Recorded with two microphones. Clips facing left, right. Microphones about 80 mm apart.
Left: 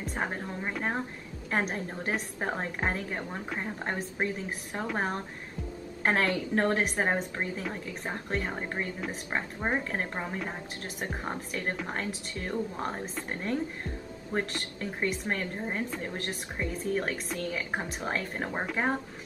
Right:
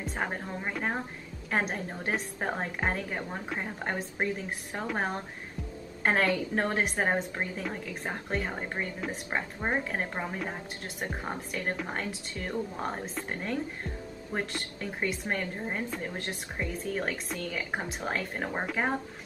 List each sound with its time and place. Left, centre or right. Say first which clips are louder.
0.0 s a woman's voice: even; centre
14.3 s a woman's voice: left 2 dB; centre